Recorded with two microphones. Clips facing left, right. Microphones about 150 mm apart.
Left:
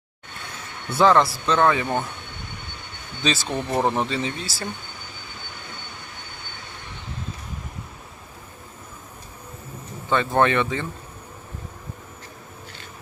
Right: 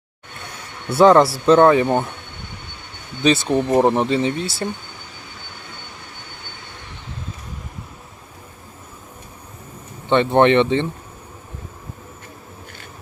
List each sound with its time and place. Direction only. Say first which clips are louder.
0.9 s speech: right 6 dB; 35° right (ahead or behind)
3.3 s speech: right 8 dB; 20° right (ahead or behind)
10.1 s speech: right 6 dB; 25° right (ahead or behind)